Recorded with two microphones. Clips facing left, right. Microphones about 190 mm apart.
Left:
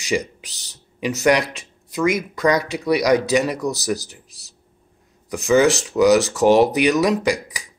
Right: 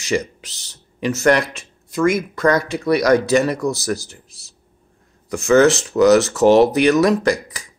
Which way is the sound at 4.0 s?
50° right (ahead or behind).